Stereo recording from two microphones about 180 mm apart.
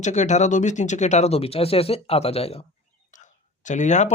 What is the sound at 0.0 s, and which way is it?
Speech, 40° left (ahead or behind).